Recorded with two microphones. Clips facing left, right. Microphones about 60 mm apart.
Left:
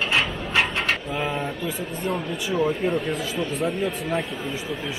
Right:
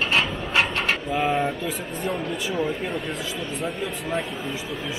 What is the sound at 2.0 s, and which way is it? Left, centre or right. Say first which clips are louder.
Speech: even; centre.